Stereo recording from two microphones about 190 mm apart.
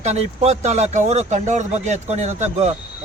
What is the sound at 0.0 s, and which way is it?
A man's voice, 35° right (ahead or behind).